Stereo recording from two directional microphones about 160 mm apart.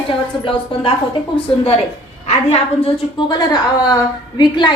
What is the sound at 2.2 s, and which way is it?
A woman's voice, 40° left (ahead or behind).